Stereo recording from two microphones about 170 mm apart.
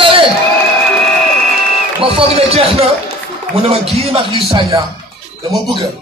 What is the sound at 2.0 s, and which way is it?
Speech, 35° right (ahead or behind).